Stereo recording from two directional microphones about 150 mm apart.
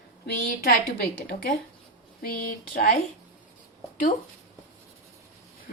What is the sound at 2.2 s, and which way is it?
Speech, 80° left.